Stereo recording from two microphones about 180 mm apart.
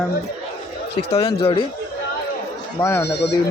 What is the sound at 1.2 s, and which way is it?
Speech, 30° left (ahead or behind).